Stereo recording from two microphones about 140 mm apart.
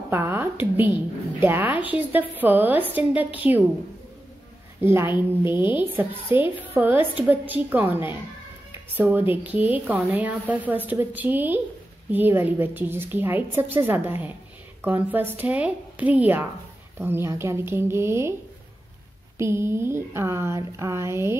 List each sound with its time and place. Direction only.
0.1 s a sound: 15° right (ahead or behind)
1.4 s a woman's voice: 15° right (ahead or behind)
4.7 s a woman's voice: 15° right (ahead or behind)
19.3 s speech: 20° right (ahead or behind)